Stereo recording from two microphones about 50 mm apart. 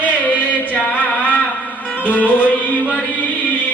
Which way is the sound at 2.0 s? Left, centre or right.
Left.